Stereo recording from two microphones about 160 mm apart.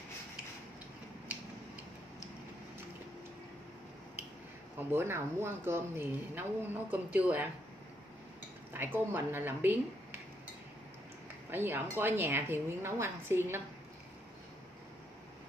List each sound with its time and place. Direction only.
4.7 s speech: 15° right (ahead or behind)
8.7 s speech: 10° right (ahead or behind)
11.5 s speech: 15° right (ahead or behind)